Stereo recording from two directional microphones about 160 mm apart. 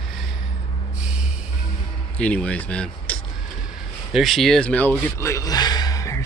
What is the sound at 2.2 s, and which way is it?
Speech, 5° left (ahead or behind).